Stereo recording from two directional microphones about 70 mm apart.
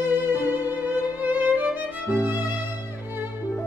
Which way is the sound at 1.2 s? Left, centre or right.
Right.